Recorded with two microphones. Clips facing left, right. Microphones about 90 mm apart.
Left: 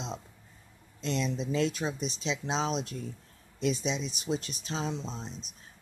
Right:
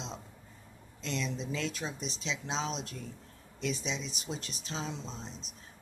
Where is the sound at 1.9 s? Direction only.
5° left (ahead or behind).